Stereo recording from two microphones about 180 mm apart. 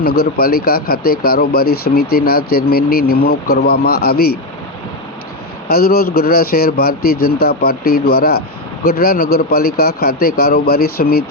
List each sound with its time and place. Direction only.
0.0 s speech: 60° left (ahead or behind)
5.6 s speech: 60° left (ahead or behind)